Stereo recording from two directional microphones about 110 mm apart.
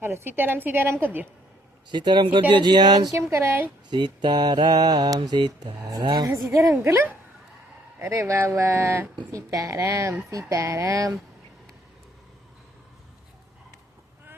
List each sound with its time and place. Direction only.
0.0 s a woman's voice: 20° right (ahead or behind)
1.9 s speech: 45° right (ahead or behind)
2.5 s mantra: 45° right (ahead or behind)
3.2 s speech: 25° right (ahead or behind)
3.8 s mantra: 40° right (ahead or behind)
6.7 s speech: 20° right (ahead or behind)